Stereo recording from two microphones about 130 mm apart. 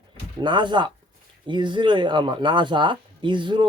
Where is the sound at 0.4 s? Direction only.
35° right (ahead or behind).